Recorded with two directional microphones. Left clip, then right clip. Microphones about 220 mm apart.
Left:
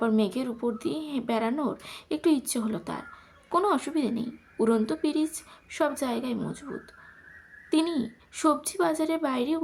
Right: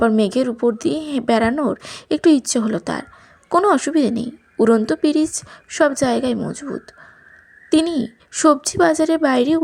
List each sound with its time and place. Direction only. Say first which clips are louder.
0.0 s a woman's voice: right 10 dB; 30° right (ahead or behind)